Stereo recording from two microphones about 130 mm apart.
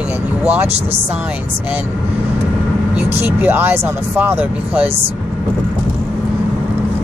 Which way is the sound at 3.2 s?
15° right (ahead or behind).